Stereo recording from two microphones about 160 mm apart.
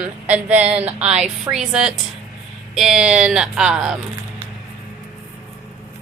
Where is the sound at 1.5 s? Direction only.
5° right (ahead or behind).